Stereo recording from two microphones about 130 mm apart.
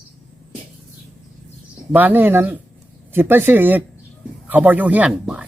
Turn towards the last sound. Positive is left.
turn(degrees=-5)  # may be behind; listen again after turning